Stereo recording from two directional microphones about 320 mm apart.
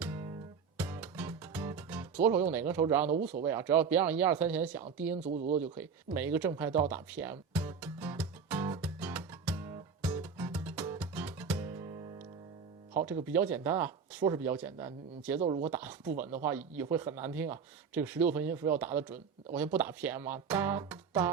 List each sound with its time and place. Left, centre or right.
0.0 s music: centre
3.4 s speech: centre
5.3 s speech: right
5.6 s speech: centre
6.1 s music: centre
13.2 s speech: centre
15.4 s speech: right
15.6 s speech: centre